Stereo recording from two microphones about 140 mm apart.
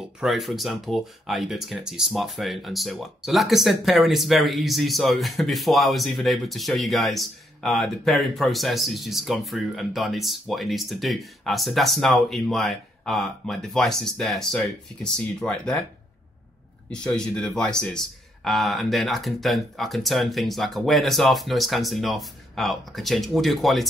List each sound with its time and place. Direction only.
0.2 s speech: centre (ahead or behind)
16.9 s speech: 5° left (ahead or behind)